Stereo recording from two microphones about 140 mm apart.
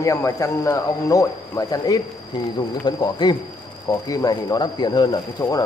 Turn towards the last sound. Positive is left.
turn(degrees=25)  # may be behind; listen again after turning